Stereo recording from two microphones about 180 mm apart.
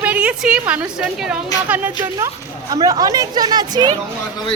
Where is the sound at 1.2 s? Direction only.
10° right (ahead or behind).